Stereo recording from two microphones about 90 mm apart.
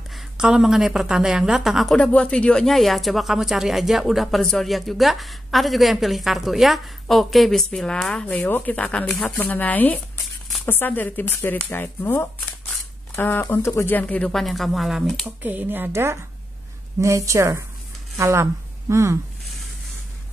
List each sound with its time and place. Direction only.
0.1 s speech: 5° right (ahead or behind)
2.0 s speech: 10° left (ahead or behind)
14.3 s speech: centre (ahead or behind)
15.2 s a woman's voice: 20° right (ahead or behind)